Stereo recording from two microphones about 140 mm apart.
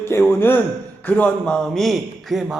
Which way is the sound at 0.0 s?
15° left (ahead or behind).